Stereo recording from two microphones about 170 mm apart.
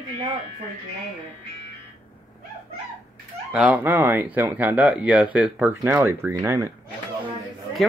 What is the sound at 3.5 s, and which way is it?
Speech, 5° right (ahead or behind).